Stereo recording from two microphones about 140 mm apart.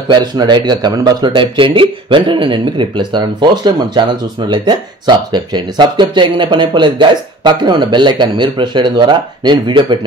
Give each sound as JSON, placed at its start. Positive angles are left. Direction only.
{"t": 0.1, "sound": "speech", "side_deg": -30}